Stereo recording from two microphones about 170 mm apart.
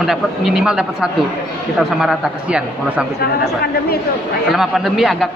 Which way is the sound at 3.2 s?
65° left (ahead or behind).